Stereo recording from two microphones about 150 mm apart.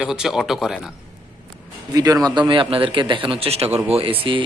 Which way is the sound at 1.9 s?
25° right (ahead or behind).